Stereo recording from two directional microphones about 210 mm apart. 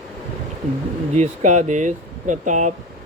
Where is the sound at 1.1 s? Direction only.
35° right (ahead or behind).